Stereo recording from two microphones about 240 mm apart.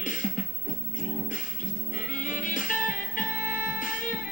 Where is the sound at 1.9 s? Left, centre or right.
Left.